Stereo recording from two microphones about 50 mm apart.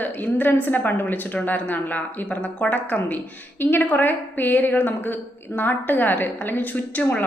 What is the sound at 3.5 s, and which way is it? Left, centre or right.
A woman's voice, left.